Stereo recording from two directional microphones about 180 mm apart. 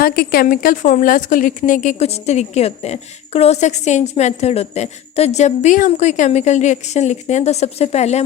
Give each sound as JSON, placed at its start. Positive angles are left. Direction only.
{"t": 0.0, "sound": "a woman's voice", "side_deg": 60}